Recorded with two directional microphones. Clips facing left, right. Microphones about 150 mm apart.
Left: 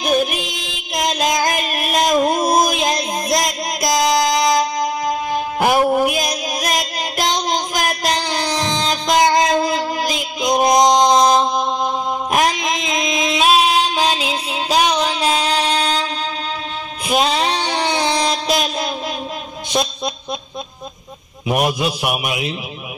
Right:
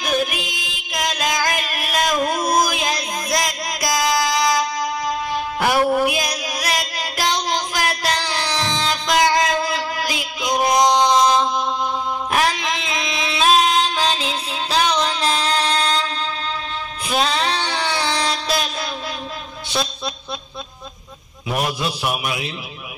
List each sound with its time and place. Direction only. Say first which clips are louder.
0.0 s music: left 4 dB; 20° left (ahead or behind)
11.5 s mantra: left 3 dB; 15° left (ahead or behind)
17.1 s a sound: left 3 dB; 15° left (ahead or behind)
21.5 s a man's voice: left 5 dB; 15° left (ahead or behind)